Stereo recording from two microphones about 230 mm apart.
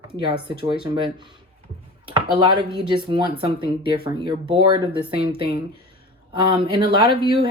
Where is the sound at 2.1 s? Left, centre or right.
Right.